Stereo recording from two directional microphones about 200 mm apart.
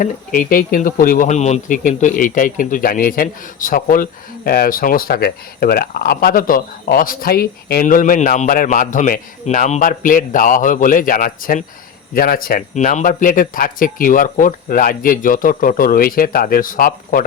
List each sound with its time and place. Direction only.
0.0 s speech: 45° left (ahead or behind)